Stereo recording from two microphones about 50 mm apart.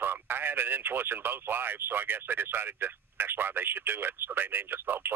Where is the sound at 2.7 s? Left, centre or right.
Right.